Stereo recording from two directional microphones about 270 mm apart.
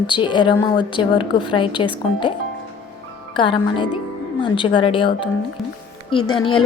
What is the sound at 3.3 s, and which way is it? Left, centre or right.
A woman's voice, centre.